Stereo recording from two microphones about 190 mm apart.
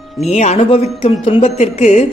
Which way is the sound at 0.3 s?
35° left (ahead or behind).